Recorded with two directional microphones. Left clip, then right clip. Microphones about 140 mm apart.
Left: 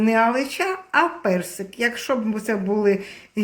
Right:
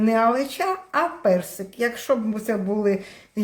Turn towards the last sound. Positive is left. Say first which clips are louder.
# left 2 dB
turn(degrees=-15)  # may be behind; listen again after turning